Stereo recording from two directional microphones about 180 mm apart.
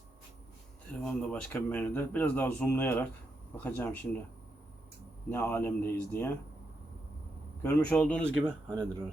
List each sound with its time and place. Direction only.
1.0 s speech: 5° left (ahead or behind)
5.3 s speech: 10° left (ahead or behind)
7.6 s speech: 5° left (ahead or behind)
8.7 s speech: 20° right (ahead or behind)